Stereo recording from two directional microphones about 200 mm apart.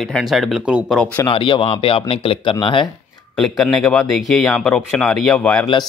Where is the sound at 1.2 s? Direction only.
25° left (ahead or behind).